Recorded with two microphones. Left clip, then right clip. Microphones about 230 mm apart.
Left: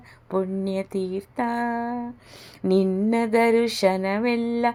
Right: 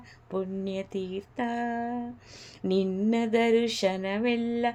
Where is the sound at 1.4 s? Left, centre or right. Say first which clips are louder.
Left 5 dB; centre.